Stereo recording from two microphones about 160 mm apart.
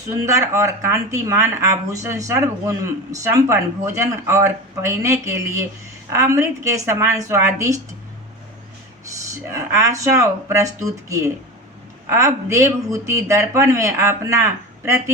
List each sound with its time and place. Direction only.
0.3 s a woman's voice: 20° right (ahead or behind)
9.5 s speech: 15° right (ahead or behind)